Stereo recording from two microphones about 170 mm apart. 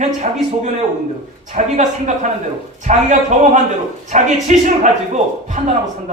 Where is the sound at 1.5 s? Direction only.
45° right (ahead or behind).